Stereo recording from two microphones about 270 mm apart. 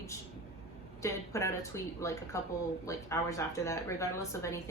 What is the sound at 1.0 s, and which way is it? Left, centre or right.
A woman's voice, centre.